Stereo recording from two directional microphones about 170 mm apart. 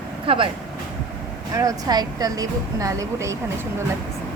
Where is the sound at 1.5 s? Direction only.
20° right (ahead or behind).